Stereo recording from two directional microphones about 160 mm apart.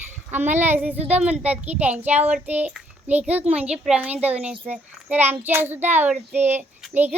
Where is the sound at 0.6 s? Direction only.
10° right (ahead or behind).